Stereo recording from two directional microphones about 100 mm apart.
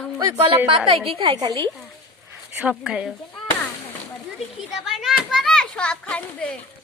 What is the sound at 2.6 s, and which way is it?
Speech, 10° right (ahead or behind).